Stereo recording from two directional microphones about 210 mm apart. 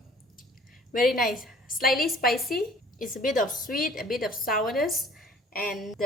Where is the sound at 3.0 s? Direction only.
40° left (ahead or behind).